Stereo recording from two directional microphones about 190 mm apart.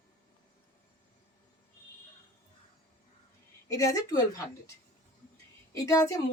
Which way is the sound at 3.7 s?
15° left (ahead or behind).